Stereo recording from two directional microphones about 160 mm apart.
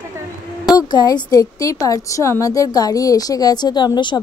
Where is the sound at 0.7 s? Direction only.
25° left (ahead or behind).